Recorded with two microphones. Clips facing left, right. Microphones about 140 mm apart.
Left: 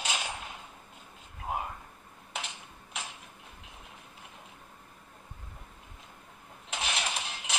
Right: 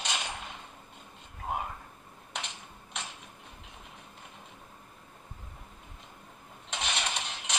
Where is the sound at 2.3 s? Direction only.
5° left (ahead or behind).